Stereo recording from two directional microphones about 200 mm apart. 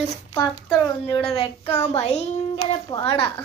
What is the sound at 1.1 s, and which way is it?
A woman's voice, 30° left (ahead or behind).